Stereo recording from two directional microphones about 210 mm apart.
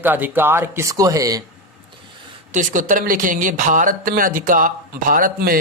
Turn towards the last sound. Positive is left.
turn(degrees=-40)  # may be behind; listen again after turning